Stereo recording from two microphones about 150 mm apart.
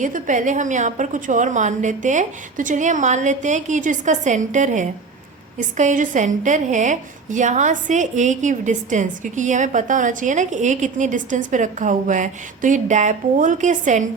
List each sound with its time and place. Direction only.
0.0 s a woman's voice: 60° right (ahead or behind)